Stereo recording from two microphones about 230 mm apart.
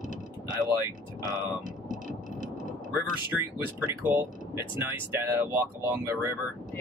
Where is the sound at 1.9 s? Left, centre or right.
Right.